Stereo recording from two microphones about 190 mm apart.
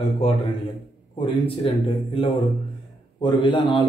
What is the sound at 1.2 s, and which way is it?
A man's voice, 30° left (ahead or behind).